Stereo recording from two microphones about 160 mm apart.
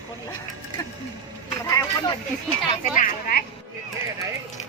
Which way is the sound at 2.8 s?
55° left (ahead or behind).